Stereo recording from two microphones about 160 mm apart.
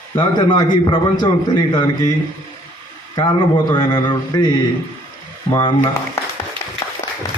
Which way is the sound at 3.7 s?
25° left (ahead or behind).